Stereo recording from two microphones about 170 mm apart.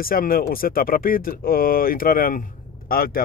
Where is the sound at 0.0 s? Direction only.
60° left (ahead or behind).